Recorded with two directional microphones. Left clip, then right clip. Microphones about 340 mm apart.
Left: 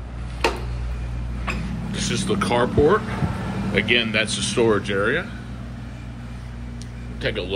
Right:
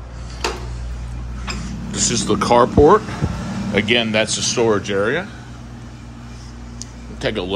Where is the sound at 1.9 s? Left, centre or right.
Centre.